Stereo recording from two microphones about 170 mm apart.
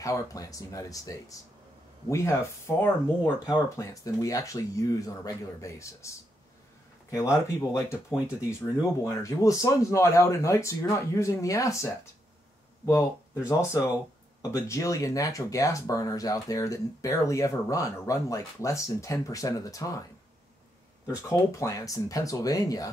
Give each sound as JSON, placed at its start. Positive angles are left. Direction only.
{"t": 0.0, "sound": "speech", "side_deg": 20}
{"t": 7.4, "sound": "speech", "side_deg": 20}
{"t": 21.2, "sound": "speech", "side_deg": 15}